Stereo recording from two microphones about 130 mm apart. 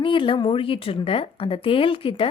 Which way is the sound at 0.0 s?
40° left (ahead or behind).